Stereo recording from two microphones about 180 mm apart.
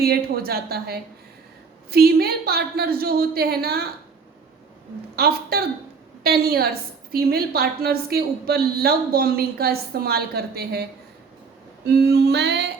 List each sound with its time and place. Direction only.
0.0 s a woman's voice: 60° right (ahead or behind)
5.1 s a woman's voice: 60° right (ahead or behind)
11.9 s female singing: 65° right (ahead or behind)